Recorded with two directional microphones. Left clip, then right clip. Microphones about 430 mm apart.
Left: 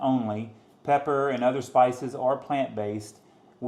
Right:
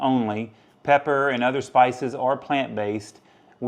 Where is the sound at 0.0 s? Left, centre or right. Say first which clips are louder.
Right 4 dB; right.